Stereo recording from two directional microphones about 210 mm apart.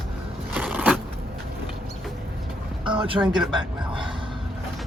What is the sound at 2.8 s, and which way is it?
Speech, 25° right (ahead or behind).